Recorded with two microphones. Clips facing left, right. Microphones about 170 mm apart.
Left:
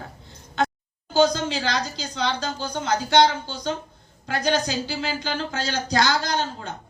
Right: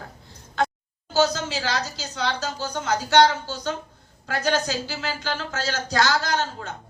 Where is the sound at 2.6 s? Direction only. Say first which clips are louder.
Left 1 dB; 10° left (ahead or behind).